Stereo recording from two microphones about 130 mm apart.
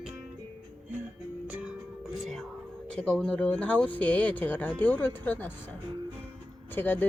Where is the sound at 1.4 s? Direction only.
15° right (ahead or behind).